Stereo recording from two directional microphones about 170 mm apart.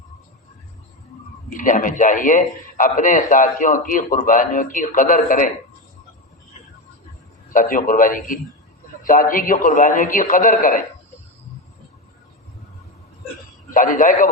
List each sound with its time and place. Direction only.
1.5 s a man's voice: 50° left (ahead or behind)
7.5 s a man's voice: 50° left (ahead or behind)
13.7 s a man's voice: 50° left (ahead or behind)